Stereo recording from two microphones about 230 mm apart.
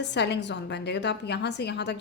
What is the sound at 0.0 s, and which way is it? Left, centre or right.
A woman's voice, left.